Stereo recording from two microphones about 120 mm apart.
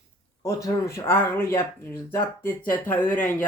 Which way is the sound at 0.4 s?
25° left (ahead or behind).